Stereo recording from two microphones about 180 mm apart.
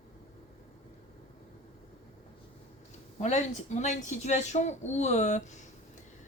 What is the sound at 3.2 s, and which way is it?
Speech, 40° left (ahead or behind).